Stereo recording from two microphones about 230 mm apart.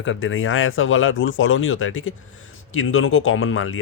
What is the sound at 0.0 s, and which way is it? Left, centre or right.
Speech, left.